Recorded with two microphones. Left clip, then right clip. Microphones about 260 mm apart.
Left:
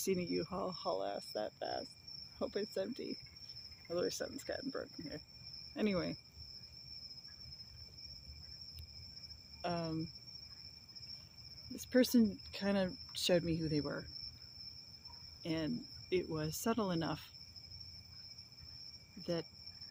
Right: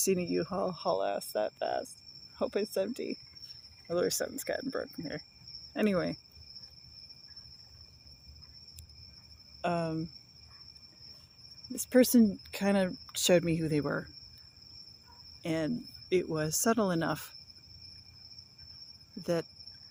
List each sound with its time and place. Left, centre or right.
0.0 s speech: right
9.6 s speech: right
11.7 s speech: right
15.4 s speech: right
19.2 s speech: right